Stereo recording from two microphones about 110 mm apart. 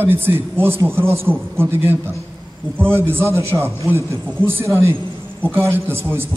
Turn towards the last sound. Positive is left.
turn(degrees=-20)  # may be behind; listen again after turning